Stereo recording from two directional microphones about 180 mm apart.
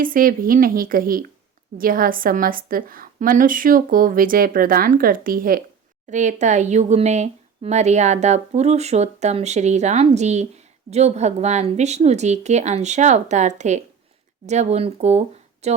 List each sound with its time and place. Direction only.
0.0 s a woman's voice: 50° right (ahead or behind)